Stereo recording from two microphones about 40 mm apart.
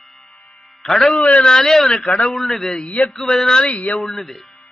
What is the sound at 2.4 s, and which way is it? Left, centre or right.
Speech, centre.